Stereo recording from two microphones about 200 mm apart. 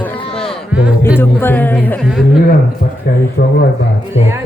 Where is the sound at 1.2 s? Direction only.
10° left (ahead or behind).